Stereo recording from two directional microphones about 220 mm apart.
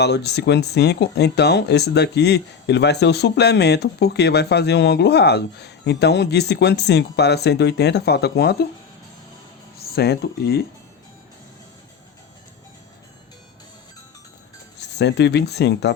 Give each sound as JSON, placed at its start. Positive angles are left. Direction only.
{"t": 0.0, "sound": "speech", "side_deg": 50}
{"t": 9.7, "sound": "speech", "side_deg": 45}
{"t": 14.8, "sound": "speech", "side_deg": 50}